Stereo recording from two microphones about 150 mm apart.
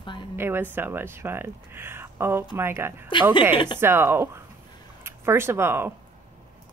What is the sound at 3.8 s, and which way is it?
Speech, 15° right (ahead or behind).